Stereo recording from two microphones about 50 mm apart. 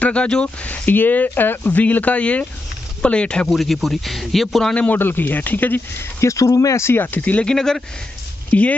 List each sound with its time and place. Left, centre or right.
0.0 s speech: left
0.7 s speech: left
3.4 s a man's voice: centre
4.9 s speech: left
6.2 s speech: left
7.2 s speech: left
7.4 s speech: centre
8.5 s speech: left